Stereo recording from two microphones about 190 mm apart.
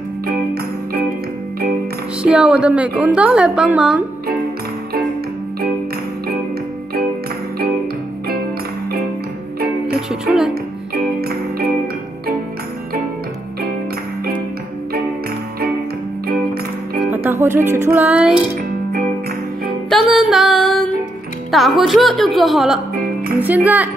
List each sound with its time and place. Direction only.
2.2 s a woman's voice: 5° right (ahead or behind)
9.9 s music: 5° right (ahead or behind)
11.1 s music: 55° right (ahead or behind)
17.0 s music: 10° right (ahead or behind)
19.9 s music: centre (ahead or behind)
21.5 s a woman's voice: centre (ahead or behind)